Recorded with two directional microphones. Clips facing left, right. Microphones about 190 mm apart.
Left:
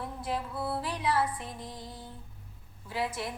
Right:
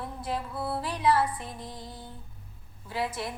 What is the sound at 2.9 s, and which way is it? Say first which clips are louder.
Music: right 1 dB; 35° right (ahead or behind).